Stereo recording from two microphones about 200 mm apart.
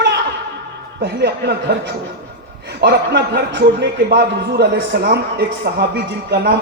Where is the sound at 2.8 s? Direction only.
55° right (ahead or behind).